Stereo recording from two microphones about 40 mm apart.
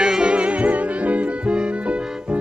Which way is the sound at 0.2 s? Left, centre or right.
Right.